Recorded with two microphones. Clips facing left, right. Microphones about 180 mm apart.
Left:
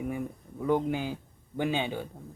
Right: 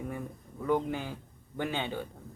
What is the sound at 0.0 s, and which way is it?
Speech, 15° left (ahead or behind).